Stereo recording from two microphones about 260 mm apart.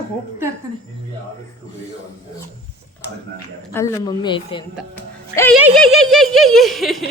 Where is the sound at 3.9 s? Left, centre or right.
Centre.